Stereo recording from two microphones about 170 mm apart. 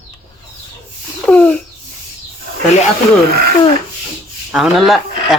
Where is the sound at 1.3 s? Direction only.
5° left (ahead or behind).